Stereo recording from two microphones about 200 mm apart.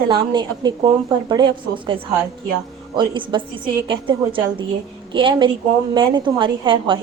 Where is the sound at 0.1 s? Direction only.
25° right (ahead or behind).